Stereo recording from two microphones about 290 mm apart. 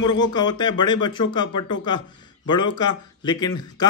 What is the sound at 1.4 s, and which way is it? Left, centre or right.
Speech, left.